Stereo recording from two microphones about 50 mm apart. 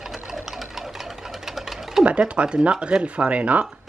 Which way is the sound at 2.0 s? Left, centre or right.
Right.